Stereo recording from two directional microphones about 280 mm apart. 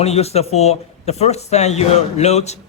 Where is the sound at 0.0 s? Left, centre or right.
Left.